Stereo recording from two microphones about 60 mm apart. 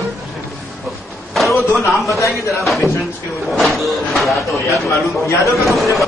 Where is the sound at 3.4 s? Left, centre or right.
Centre.